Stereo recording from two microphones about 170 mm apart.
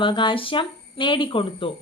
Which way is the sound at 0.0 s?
30° left (ahead or behind).